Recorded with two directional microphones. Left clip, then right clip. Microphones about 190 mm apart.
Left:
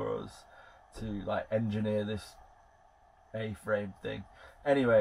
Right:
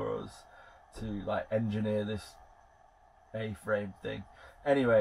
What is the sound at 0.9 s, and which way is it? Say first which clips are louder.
Speech: even; 20° left (ahead or behind).